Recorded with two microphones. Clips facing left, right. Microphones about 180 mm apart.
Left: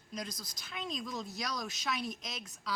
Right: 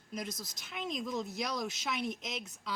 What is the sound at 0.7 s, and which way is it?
Speech, 20° right (ahead or behind).